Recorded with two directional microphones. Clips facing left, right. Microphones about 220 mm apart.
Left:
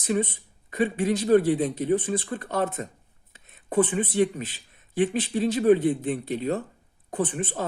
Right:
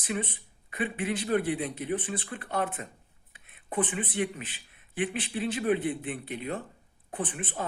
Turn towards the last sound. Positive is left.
turn(degrees=40)  # may be behind; listen again after turning